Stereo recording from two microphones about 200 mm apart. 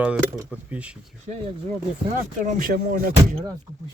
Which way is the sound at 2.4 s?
40° right (ahead or behind).